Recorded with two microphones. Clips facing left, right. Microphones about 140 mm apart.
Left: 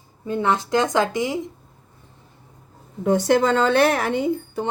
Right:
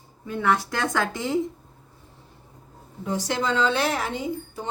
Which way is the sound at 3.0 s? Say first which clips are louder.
Left 9 dB; 60° left (ahead or behind).